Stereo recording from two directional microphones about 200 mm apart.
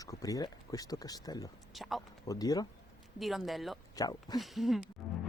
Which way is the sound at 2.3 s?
20° left (ahead or behind).